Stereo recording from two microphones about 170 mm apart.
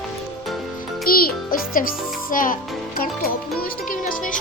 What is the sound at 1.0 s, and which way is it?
Music, 60° left (ahead or behind).